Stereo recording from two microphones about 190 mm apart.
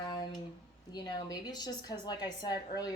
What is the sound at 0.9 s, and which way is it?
Speech, 20° left (ahead or behind).